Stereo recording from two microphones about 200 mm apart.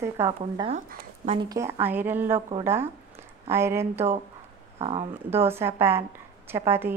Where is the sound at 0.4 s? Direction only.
30° right (ahead or behind).